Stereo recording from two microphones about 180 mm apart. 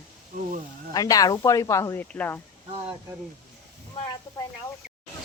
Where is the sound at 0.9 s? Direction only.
20° left (ahead or behind).